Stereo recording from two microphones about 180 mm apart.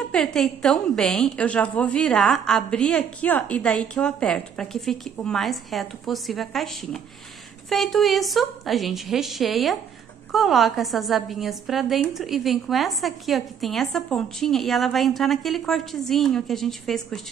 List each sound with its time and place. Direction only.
0.1 s a woman's voice: 5° left (ahead or behind)